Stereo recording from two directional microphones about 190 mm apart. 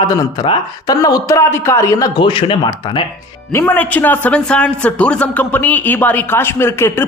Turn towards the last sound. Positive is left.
turn(degrees=10)  # may be behind; listen again after turning